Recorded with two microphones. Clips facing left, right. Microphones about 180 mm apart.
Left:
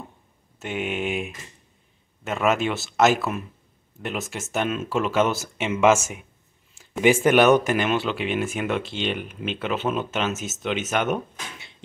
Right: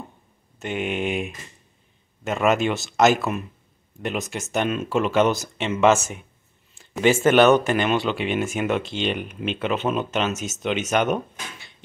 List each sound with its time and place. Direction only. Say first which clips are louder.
0.6 s speech: right 2 dB; 5° left (ahead or behind)